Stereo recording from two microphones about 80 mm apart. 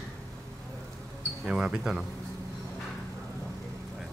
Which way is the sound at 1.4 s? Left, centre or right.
Centre.